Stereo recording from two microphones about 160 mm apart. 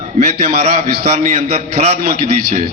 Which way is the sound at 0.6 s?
45° right (ahead or behind).